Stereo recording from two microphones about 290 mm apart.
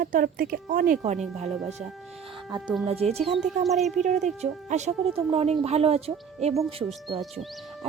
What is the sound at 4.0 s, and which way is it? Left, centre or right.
Speech, right.